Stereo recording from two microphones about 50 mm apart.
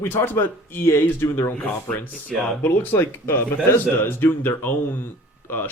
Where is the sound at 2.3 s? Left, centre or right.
Centre.